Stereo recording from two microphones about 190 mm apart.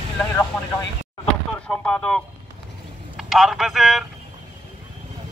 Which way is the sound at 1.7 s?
5° left (ahead or behind).